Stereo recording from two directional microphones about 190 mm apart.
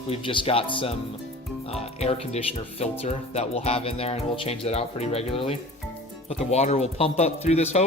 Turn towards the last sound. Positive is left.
turn(degrees=35)  # may be behind; listen again after turning